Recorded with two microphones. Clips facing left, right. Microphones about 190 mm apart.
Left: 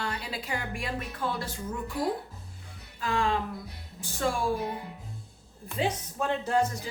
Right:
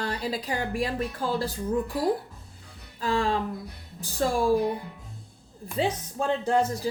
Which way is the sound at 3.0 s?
35° right (ahead or behind).